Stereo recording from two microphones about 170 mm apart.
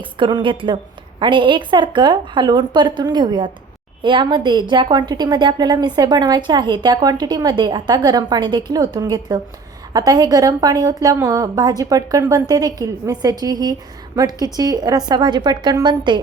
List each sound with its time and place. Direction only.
0.0 s a woman's voice: 30° right (ahead or behind)